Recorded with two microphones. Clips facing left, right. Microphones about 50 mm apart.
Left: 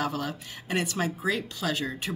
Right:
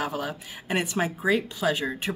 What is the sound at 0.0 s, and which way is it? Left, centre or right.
Speech, centre.